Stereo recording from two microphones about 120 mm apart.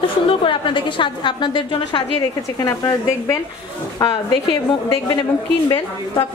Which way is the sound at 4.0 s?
40° left (ahead or behind).